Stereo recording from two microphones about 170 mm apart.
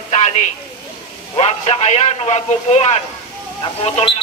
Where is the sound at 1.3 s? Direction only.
35° left (ahead or behind).